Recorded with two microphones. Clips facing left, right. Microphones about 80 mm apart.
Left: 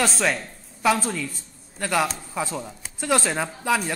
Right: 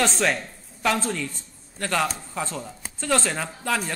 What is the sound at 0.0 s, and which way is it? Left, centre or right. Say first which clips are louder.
A woman's voice: even; centre.